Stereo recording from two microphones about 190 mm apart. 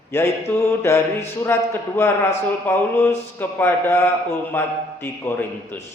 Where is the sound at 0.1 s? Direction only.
15° left (ahead or behind).